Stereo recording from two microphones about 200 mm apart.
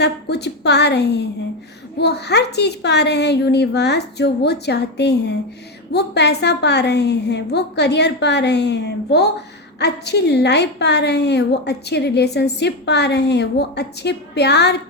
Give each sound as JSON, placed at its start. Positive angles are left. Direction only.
{"t": 0.0, "sound": "a woman's voice", "side_deg": 55}